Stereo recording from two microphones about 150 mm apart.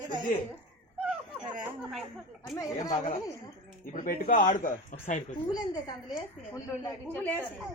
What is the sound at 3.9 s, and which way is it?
Speech, 65° left (ahead or behind).